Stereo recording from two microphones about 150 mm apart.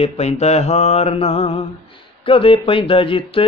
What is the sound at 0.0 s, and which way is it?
Mantra, 45° left (ahead or behind).